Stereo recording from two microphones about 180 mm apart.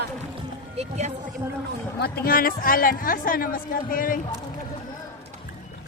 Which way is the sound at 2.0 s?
60° left (ahead or behind).